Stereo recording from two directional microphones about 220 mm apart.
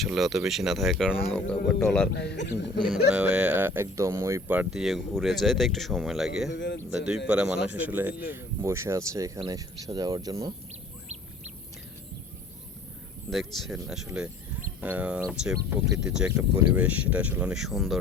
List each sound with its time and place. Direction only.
0.0 s speech: centre (ahead or behind)
2.1 s speech: 50° left (ahead or behind)
2.9 s speech: 5° right (ahead or behind)
6.5 s a man's voice: 55° left (ahead or behind)
6.9 s speech: 5° right (ahead or behind)
13.3 s speech: centre (ahead or behind)